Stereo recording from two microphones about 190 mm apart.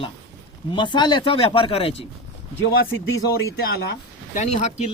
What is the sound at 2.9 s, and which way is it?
Speech, 90° left.